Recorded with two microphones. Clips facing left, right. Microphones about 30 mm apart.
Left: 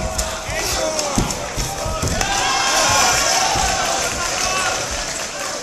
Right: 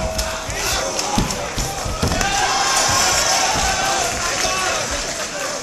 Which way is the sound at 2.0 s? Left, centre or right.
Right.